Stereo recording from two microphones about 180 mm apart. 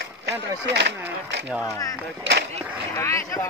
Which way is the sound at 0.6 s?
75° right (ahead or behind).